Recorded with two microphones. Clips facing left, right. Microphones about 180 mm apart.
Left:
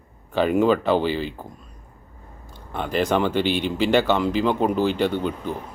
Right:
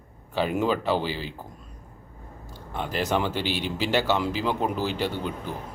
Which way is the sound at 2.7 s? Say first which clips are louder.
Left 5 dB; 5° right (ahead or behind).